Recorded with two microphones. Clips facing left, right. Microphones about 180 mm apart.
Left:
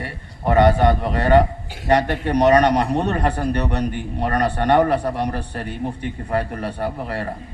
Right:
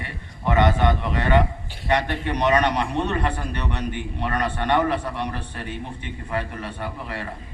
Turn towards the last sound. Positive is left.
turn(degrees=40)  # may be behind; listen again after turning